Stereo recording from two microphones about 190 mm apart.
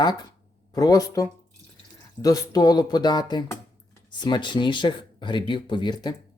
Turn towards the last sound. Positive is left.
turn(degrees=25)  # may be behind; listen again after turning